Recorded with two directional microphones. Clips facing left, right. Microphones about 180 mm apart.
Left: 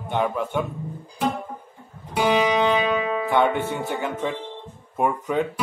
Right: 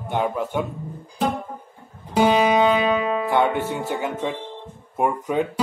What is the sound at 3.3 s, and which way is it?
Speech, 15° right (ahead or behind).